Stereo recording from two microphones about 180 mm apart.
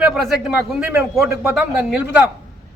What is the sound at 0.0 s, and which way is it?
A man's voice, centre (ahead or behind).